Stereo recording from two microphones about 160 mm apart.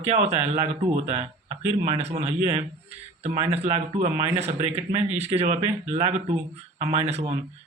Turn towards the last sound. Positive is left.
turn(degrees=-40)  # may be behind; listen again after turning